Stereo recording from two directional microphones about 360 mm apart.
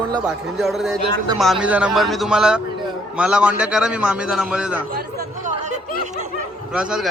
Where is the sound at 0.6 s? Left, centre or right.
Centre.